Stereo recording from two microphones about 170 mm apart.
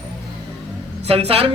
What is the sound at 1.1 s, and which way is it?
Speech, 35° right (ahead or behind).